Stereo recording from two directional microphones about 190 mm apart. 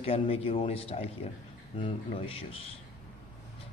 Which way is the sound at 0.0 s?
30° left (ahead or behind).